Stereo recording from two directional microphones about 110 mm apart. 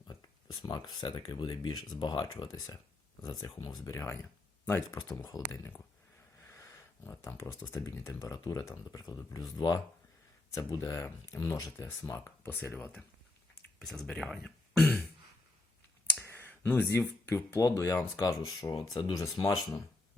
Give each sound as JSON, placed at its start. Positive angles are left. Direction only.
{"t": 0.1, "sound": "speech", "side_deg": 40}
{"t": 4.9, "sound": "speech", "side_deg": 35}
{"t": 6.5, "sound": "a sound", "side_deg": 25}
{"t": 7.7, "sound": "speech", "side_deg": 25}
{"t": 8.3, "sound": "speech", "side_deg": 35}
{"t": 12.1, "sound": "speech", "side_deg": 20}
{"t": 13.7, "sound": "a sound", "side_deg": 0}
{"t": 16.2, "sound": "a sound", "side_deg": 20}
{"t": 17.2, "sound": "speech", "side_deg": 25}
{"t": 18.7, "sound": "speech", "side_deg": 45}